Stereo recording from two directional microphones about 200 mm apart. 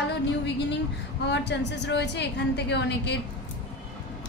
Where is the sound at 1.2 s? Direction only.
60° left (ahead or behind).